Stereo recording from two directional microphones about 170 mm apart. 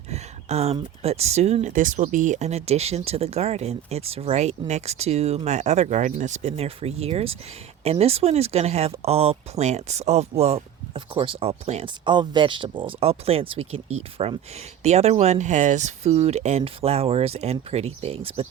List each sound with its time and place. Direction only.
0.1 s speech: 40° right (ahead or behind)